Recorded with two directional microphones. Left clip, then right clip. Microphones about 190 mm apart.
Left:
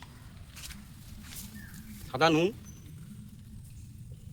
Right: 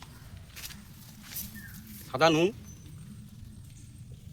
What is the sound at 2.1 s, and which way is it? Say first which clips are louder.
Speech: right 1 dB; 5° right (ahead or behind).